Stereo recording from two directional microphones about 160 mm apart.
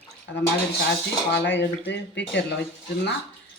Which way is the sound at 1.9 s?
90° left.